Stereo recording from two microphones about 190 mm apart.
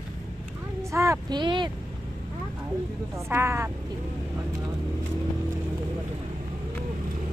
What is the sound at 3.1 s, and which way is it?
Speech, 15° right (ahead or behind).